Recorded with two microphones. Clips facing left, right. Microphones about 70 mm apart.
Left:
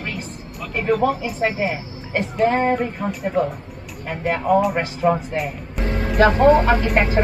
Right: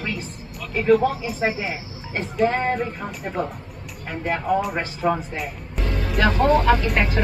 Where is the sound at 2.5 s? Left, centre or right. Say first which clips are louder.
Left 4 dB; left.